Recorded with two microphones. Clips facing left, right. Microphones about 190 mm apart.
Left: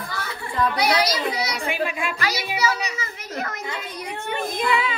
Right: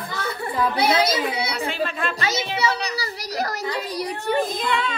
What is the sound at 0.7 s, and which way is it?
Speech, 25° right (ahead or behind).